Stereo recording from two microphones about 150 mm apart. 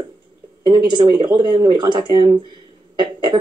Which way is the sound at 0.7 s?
30° right (ahead or behind).